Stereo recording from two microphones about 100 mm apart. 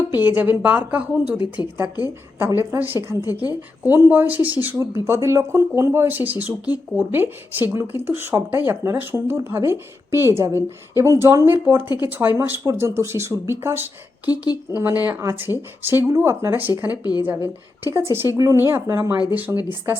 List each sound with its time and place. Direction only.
0.1 s a woman's voice: 20° right (ahead or behind)
14.3 s speech: 40° left (ahead or behind)
15.2 s speech: 30° right (ahead or behind)
16.9 s a woman's voice: 40° left (ahead or behind)
17.2 s a woman's voice: 25° right (ahead or behind)